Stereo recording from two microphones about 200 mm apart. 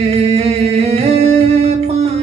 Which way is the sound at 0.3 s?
30° right (ahead or behind).